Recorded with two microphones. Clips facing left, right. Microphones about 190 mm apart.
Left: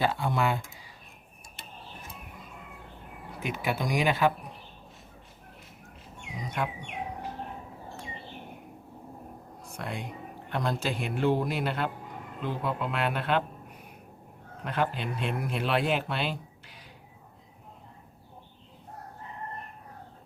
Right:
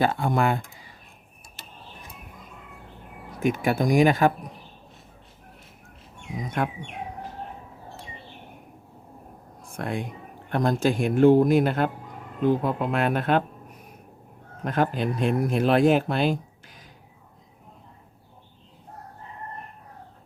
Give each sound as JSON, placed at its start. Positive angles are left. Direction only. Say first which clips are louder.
{"t": 0.0, "sound": "a man's voice", "louder": "right 5 dB", "side_deg": -50}
{"t": 3.4, "sound": "a man's voice", "louder": "right 8 dB", "side_deg": -45}
{"t": 6.3, "sound": "a man's voice", "louder": "right 5 dB", "side_deg": -50}
{"t": 9.7, "sound": "a man's voice", "louder": "right 7 dB", "side_deg": -50}